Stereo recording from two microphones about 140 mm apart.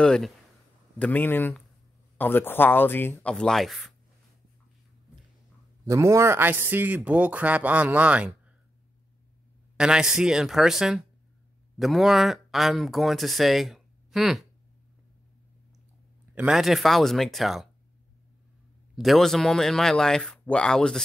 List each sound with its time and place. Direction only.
0.0 s speech: 5° left (ahead or behind)
5.9 s speech: 20° right (ahead or behind)
9.8 s speech: 5° right (ahead or behind)
16.3 s speech: 5° right (ahead or behind)
18.9 s speech: centre (ahead or behind)